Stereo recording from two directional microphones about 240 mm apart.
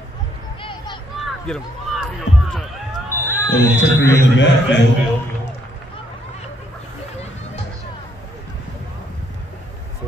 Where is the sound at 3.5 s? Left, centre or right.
Left.